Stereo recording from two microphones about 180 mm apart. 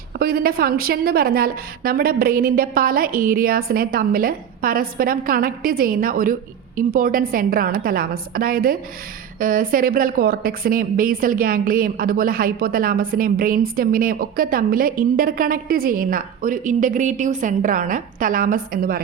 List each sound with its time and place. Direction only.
0.2 s a woman's voice: 55° right (ahead or behind)